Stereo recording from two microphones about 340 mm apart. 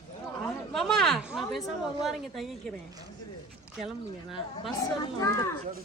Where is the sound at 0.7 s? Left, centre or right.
Centre.